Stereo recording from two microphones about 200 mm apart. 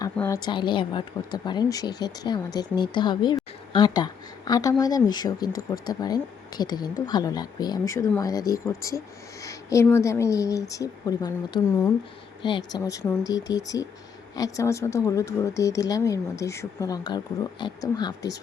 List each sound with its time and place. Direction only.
0.2 s speech: 20° left (ahead or behind)